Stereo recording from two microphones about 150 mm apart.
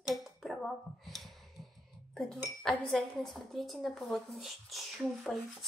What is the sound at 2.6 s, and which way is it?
A woman's voice, centre (ahead or behind).